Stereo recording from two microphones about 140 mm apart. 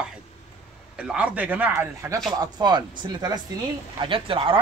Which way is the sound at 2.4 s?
30° right (ahead or behind).